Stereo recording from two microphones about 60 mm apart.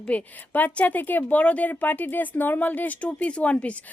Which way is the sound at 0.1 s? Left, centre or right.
Left.